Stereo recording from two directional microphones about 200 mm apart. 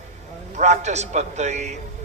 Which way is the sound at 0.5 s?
35° right (ahead or behind).